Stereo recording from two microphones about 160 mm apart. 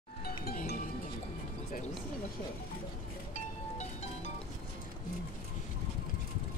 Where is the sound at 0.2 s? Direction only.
70° left (ahead or behind).